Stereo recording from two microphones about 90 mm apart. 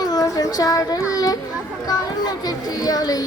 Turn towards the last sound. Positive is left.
turn(degrees=45)  # may be behind; listen again after turning